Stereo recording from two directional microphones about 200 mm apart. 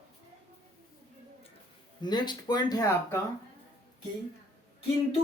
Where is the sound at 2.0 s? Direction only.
20° left (ahead or behind).